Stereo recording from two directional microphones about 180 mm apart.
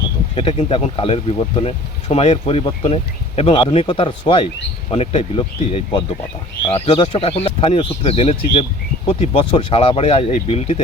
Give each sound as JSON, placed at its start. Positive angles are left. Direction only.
{"t": 0.3, "sound": "speech", "side_deg": 30}